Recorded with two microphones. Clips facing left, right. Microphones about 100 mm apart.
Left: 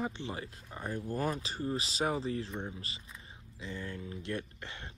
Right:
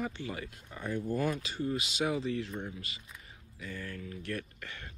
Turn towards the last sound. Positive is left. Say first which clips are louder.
# even
turn(degrees=25)  # may be behind; listen again after turning